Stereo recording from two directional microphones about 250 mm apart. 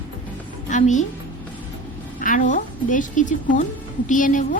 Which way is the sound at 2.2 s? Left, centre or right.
Left.